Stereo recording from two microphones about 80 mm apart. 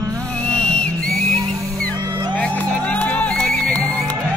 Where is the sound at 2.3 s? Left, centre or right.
Centre.